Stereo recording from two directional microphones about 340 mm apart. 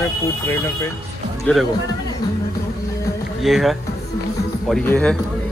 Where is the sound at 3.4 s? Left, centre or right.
Centre.